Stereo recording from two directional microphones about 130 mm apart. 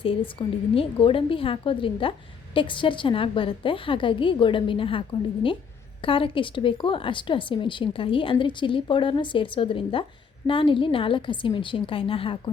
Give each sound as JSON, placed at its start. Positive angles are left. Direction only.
{"t": 0.0, "sound": "a woman's voice", "side_deg": 45}